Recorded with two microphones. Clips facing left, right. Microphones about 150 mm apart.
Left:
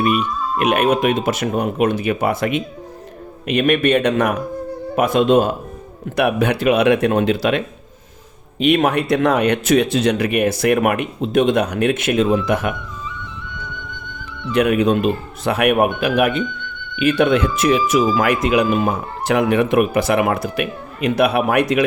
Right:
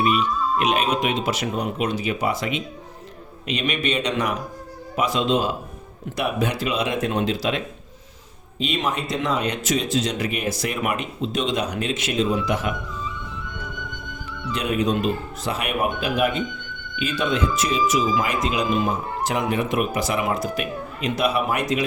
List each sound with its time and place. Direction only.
0.0 s speech: 50° left (ahead or behind)
14.5 s speech: 60° left (ahead or behind)